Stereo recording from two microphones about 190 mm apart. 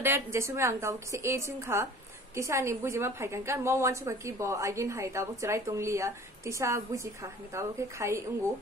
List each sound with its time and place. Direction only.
0.0 s a woman's voice: 15° right (ahead or behind)